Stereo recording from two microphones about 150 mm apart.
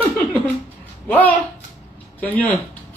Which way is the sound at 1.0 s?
10° left (ahead or behind).